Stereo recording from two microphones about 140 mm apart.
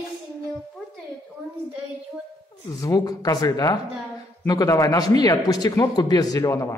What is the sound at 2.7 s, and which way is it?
A man's voice, 25° left (ahead or behind).